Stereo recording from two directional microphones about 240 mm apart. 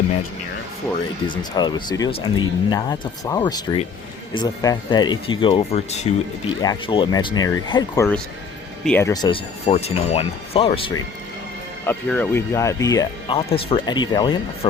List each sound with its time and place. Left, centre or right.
1.3 s speech: centre
11.9 s speech: centre